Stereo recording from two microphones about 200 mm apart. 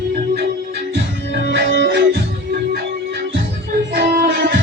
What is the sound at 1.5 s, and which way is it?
Music, 60° right (ahead or behind).